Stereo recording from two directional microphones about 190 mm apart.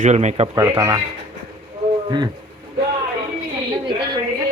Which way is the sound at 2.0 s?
20° right (ahead or behind).